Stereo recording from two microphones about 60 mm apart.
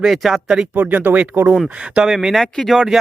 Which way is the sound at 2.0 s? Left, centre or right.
Centre.